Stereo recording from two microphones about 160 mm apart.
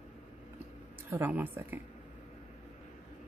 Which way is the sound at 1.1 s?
10° right (ahead or behind).